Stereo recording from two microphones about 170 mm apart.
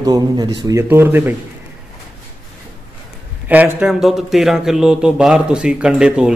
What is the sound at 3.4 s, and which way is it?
Speech, 10° right (ahead or behind).